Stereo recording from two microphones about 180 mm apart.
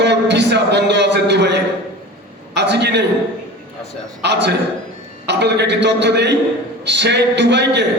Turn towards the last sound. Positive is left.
turn(degrees=-75)  # may be behind; listen again after turning